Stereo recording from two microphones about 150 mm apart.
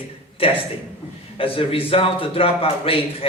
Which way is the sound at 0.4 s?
40° left (ahead or behind).